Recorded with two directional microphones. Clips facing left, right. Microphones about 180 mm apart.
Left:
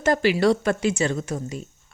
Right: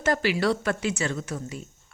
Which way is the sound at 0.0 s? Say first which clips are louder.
Left 5 dB; 25° left (ahead or behind).